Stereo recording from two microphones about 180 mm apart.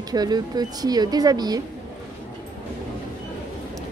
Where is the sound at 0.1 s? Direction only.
20° right (ahead or behind).